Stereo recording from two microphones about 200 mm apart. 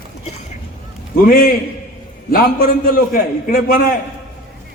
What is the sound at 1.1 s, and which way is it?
A man's voice, 45° left (ahead or behind).